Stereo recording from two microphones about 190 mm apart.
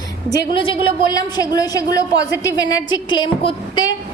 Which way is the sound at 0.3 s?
20° left (ahead or behind).